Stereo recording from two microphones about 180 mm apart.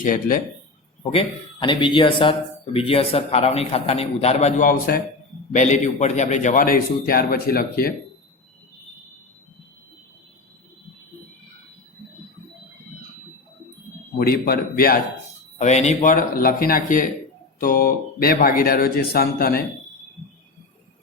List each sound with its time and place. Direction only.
0.0 s a man's voice: 50° left (ahead or behind)
1.1 s a man's voice: 30° left (ahead or behind); by 5.0 s 55° left (ahead or behind)
5.5 s a man's voice: 40° left (ahead or behind)
14.2 s speech: 60° left (ahead or behind)
15.5 s a man's voice: 40° left (ahead or behind); by 19.6 s 55° left (ahead or behind)